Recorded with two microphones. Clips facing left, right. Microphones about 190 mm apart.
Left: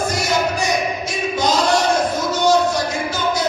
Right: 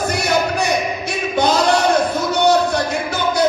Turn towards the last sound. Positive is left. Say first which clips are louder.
# right 2 dB
turn(degrees=-60)  # may be behind; listen again after turning